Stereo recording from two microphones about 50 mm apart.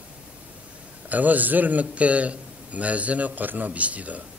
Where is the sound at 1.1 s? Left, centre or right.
Right.